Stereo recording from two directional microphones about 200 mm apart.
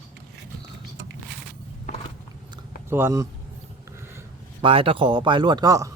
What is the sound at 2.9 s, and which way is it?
Speech, 10° right (ahead or behind).